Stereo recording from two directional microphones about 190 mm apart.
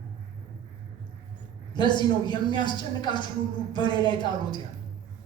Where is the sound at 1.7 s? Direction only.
25° left (ahead or behind).